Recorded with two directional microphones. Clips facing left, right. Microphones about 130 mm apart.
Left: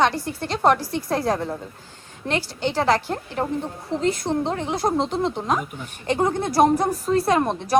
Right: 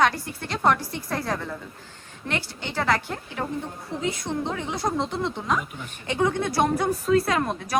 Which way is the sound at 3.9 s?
90° left.